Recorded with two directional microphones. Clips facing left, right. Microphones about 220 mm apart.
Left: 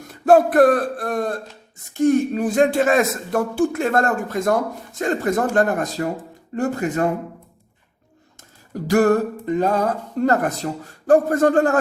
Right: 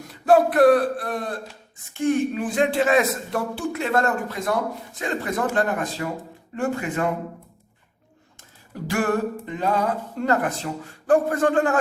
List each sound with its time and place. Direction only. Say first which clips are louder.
0.1 s speech: left 3 dB; 50° left (ahead or behind)
6.6 s music: left 4 dB; 40° left (ahead or behind)
8.4 s music: left 4 dB; 40° left (ahead or behind)